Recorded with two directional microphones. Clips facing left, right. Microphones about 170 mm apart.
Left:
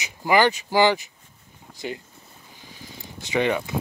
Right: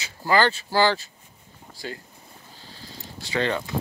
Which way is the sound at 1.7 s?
20° left (ahead or behind).